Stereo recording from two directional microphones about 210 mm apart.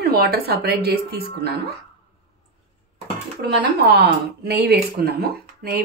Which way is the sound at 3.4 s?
50° right (ahead or behind).